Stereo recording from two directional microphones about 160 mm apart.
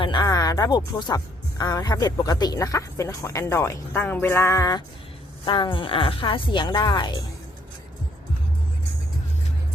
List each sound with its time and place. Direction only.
0.0 s speech: 30° left (ahead or behind)
5.5 s speech: 30° left (ahead or behind)